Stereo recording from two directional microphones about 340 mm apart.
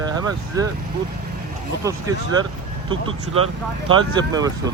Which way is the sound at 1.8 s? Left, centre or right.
Centre.